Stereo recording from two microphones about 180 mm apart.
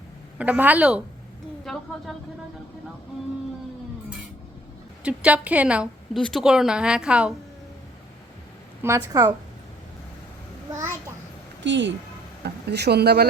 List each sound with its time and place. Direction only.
0.3 s a woman's voice: 10° right (ahead or behind)
5.0 s a woman's voice: 5° right (ahead or behind)
8.8 s a woman's voice: 15° right (ahead or behind)
11.6 s speech: 80° right
12.4 s speech: 65° right (ahead or behind)